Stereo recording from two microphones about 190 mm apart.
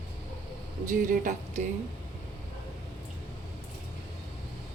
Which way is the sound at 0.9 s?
45° right (ahead or behind).